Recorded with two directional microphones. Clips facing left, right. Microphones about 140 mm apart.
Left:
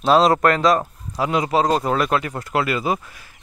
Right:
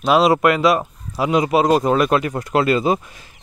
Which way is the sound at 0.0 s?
5° right (ahead or behind).